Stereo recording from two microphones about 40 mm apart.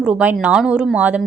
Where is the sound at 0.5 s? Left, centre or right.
Right.